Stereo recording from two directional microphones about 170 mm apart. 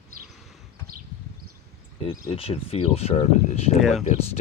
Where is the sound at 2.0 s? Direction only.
30° left (ahead or behind).